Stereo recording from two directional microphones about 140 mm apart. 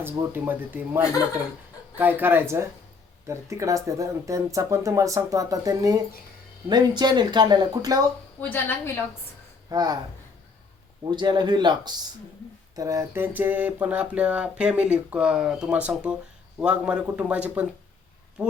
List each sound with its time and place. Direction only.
0.0 s speech: 15° right (ahead or behind)
8.4 s a woman's voice: 15° left (ahead or behind)
9.6 s speech: 30° right (ahead or behind)
11.0 s speech: 30° right (ahead or behind); by 17.7 s 10° right (ahead or behind)